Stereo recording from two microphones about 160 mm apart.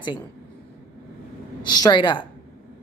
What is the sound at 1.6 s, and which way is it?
Speech, 25° left (ahead or behind).